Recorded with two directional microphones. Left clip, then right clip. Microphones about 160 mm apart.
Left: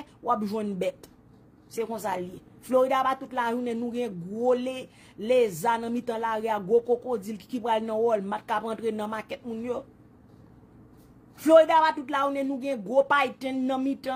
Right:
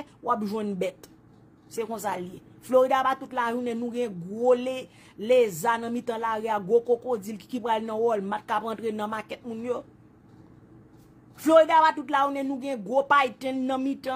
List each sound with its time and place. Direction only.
0.0 s a woman's voice: 15° right (ahead or behind)
11.3 s a woman's voice: 15° right (ahead or behind)